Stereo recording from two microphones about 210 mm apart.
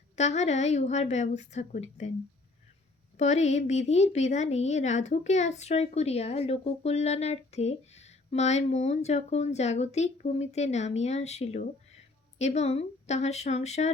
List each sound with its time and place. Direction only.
0.2 s a woman's voice: 30° left (ahead or behind)
3.2 s a woman's voice: 30° left (ahead or behind)